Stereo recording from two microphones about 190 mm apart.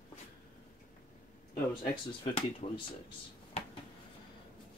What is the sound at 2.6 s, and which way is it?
Speech, 35° left (ahead or behind).